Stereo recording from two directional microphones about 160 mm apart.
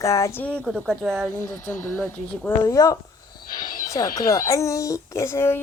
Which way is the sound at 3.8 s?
20° left (ahead or behind).